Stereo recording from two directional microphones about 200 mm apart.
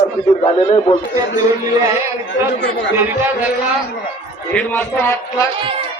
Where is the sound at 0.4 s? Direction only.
30° left (ahead or behind).